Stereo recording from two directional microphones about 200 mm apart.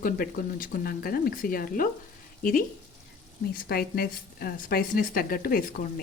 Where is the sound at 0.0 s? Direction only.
45° left (ahead or behind).